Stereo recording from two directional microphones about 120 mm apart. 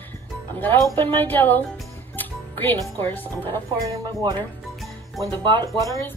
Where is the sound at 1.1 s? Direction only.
15° left (ahead or behind).